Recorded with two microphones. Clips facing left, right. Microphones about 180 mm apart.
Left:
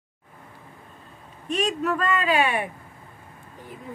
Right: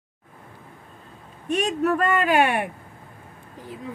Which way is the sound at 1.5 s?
60° right (ahead or behind).